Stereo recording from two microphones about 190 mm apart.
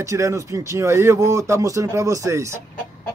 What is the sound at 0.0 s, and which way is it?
Speech, 15° right (ahead or behind).